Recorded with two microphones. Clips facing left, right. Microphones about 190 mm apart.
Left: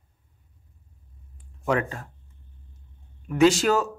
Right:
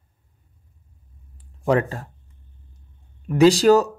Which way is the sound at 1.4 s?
35° right (ahead or behind).